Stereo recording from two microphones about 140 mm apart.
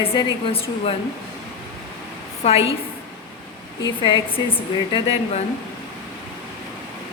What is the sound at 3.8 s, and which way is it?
A woman's voice, 40° left (ahead or behind).